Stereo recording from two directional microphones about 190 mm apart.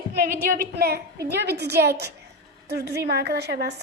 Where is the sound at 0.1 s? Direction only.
55° right (ahead or behind).